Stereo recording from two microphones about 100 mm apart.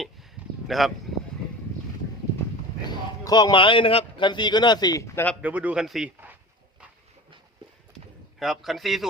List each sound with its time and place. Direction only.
0.4 s a sound: 15° right (ahead or behind)
0.7 s a man's voice: centre (ahead or behind)
2.8 s a man's voice: 45° left (ahead or behind)
5.4 s speech: 15° right (ahead or behind)
5.8 s a man's voice: 5° right (ahead or behind)
8.4 s a man's voice: centre (ahead or behind)